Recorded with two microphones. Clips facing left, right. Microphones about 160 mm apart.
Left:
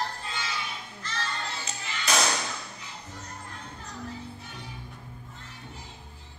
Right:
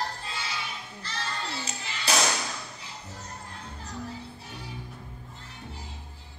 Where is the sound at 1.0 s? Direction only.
30° right (ahead or behind).